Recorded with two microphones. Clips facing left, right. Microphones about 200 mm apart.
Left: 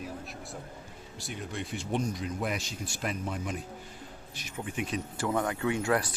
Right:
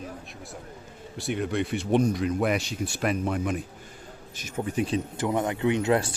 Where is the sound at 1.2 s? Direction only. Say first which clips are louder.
Right 11 dB; 65° right (ahead or behind).